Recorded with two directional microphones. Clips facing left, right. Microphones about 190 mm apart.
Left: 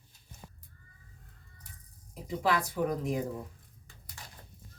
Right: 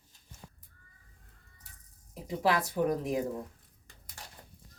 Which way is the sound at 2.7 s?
40° right (ahead or behind).